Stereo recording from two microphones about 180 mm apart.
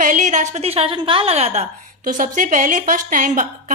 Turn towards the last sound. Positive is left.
turn(degrees=-45)  # may be behind; listen again after turning